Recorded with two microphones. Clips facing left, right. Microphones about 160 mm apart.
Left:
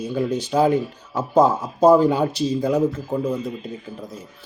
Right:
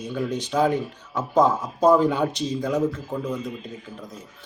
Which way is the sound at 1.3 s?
5° left (ahead or behind).